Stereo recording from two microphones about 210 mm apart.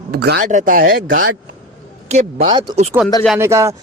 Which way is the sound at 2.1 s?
25° right (ahead or behind).